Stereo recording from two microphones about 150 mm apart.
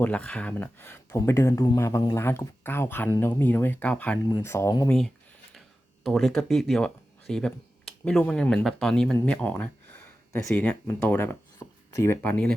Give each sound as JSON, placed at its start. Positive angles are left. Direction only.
{"t": 0.0, "sound": "speech", "side_deg": 10}
{"t": 4.9, "sound": "speech", "side_deg": 5}
{"t": 11.6, "sound": "a sound", "side_deg": 15}
{"t": 11.9, "sound": "speech", "side_deg": 15}